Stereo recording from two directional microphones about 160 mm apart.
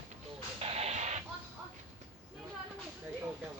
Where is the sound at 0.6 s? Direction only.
40° right (ahead or behind).